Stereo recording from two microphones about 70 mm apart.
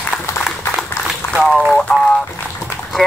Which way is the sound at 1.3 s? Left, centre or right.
Centre.